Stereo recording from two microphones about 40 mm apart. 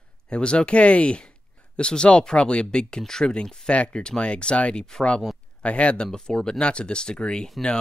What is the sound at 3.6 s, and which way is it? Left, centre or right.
Speech, left.